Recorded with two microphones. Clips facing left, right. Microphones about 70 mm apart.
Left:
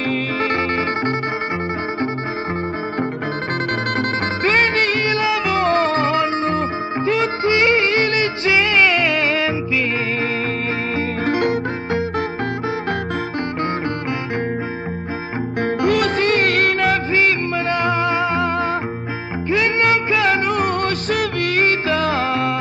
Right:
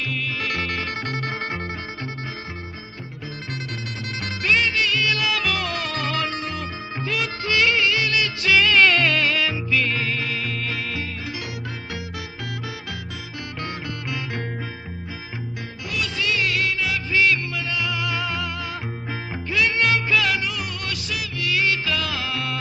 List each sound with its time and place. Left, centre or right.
0.1 s music: left
4.4 s music: left
11.0 s music: left
15.6 s music: left